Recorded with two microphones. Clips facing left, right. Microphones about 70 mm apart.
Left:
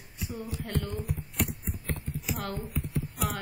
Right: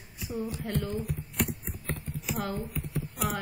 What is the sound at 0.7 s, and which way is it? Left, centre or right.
Speech, right.